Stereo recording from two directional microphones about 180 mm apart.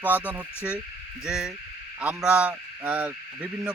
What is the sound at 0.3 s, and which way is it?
A man's voice, 5° right (ahead or behind).